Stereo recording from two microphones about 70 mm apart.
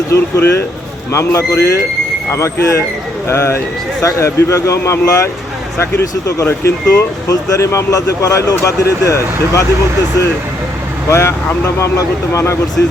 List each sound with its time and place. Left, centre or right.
0.1 s a man's voice: left
11.1 s speech: left